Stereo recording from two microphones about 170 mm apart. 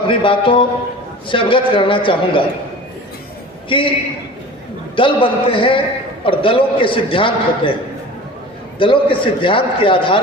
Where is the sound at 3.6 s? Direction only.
30° left (ahead or behind).